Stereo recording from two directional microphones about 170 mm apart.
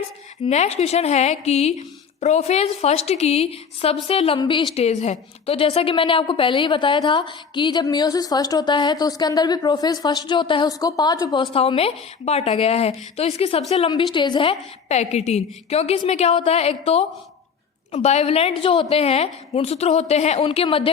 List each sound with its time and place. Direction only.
0.4 s a woman's voice: 40° left (ahead or behind)
4.7 s a woman's voice: 40° left (ahead or behind)
14.8 s a woman's voice: 40° left (ahead or behind)